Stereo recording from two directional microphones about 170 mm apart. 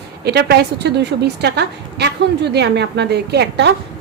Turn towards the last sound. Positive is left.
turn(degrees=-85)